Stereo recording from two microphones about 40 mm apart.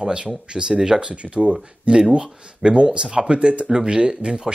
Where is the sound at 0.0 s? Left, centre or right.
Right.